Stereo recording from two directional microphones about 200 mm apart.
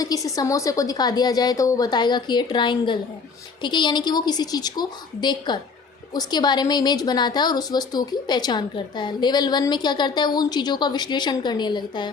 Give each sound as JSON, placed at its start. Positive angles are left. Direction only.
{"t": 0.0, "sound": "a woman's voice", "side_deg": 15}